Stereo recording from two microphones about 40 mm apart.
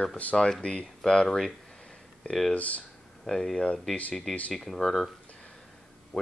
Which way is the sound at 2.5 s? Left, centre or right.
Left.